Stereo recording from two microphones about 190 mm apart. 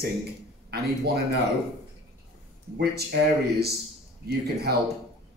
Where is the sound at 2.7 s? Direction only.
55° right (ahead or behind).